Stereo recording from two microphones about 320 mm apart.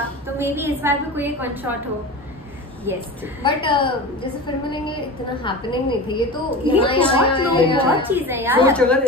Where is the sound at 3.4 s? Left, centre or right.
Centre.